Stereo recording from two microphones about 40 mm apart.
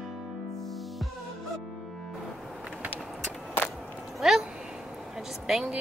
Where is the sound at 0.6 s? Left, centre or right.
Centre.